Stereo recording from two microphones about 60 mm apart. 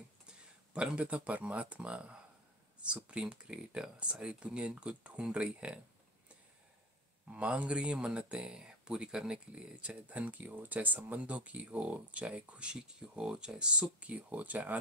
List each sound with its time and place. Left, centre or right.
0.7 s speech: right
7.2 s speech: right